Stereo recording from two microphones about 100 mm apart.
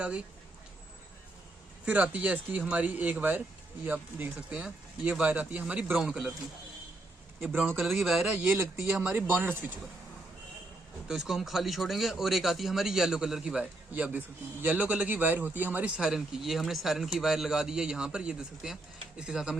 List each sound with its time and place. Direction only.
1.8 s speech: 15° right (ahead or behind)
7.4 s a man's voice: 10° right (ahead or behind)
8.4 s speech: 20° right (ahead or behind)
11.1 s a man's voice: 5° right (ahead or behind)